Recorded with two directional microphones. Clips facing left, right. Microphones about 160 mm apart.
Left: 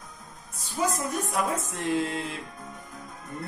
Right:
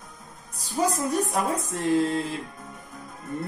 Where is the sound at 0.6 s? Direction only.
35° right (ahead or behind).